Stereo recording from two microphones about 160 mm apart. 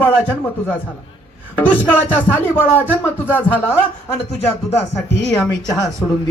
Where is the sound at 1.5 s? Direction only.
10° left (ahead or behind).